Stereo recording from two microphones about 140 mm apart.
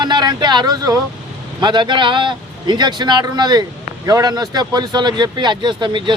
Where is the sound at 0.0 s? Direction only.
30° right (ahead or behind).